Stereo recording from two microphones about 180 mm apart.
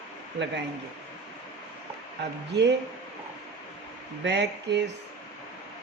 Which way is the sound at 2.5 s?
70° right (ahead or behind).